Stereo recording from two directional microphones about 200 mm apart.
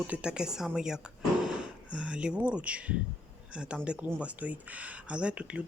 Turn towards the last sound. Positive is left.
turn(degrees=-5)  # may be behind; listen again after turning